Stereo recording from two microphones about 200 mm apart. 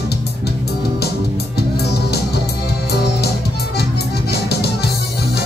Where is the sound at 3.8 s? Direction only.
55° left (ahead or behind).